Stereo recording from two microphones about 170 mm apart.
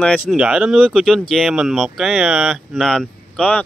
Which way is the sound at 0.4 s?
5° right (ahead or behind).